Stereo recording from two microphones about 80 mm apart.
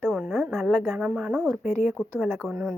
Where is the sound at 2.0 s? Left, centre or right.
Centre.